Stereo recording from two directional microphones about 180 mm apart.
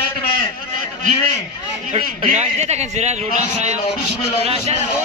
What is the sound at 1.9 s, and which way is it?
A man's voice, 40° right (ahead or behind).